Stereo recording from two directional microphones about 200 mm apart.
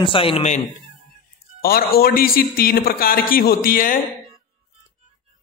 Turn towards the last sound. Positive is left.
turn(degrees=45)  # may be behind; listen again after turning